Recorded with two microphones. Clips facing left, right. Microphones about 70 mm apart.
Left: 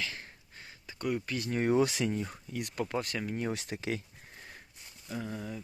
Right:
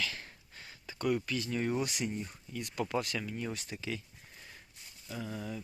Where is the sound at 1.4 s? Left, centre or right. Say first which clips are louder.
Left 3 dB; left.